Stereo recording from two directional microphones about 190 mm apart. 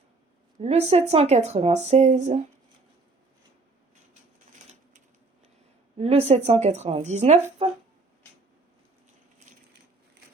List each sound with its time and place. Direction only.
0.6 s speech: 35° right (ahead or behind)
6.0 s speech: 35° right (ahead or behind)